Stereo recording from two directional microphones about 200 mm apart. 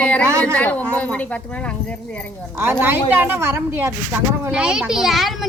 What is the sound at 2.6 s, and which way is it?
A woman's voice, 10° right (ahead or behind).